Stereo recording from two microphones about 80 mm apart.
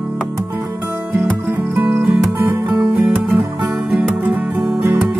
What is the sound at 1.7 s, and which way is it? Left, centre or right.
Music, centre.